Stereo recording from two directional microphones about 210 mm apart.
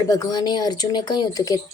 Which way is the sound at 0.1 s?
20° left (ahead or behind).